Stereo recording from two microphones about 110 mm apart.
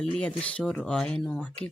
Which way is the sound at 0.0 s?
10° left (ahead or behind).